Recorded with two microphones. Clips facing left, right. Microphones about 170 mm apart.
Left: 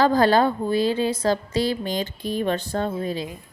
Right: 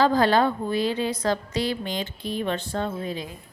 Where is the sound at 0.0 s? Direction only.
40° left (ahead or behind).